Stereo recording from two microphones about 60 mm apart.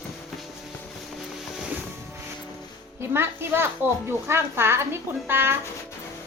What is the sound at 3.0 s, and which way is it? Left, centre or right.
A child's voice, right.